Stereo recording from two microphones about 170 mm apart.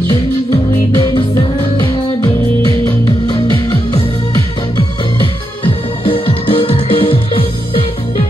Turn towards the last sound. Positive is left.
turn(degrees=30)  # may be behind; listen again after turning